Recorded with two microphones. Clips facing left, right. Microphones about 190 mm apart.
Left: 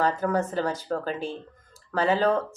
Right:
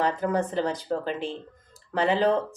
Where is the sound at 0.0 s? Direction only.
15° right (ahead or behind).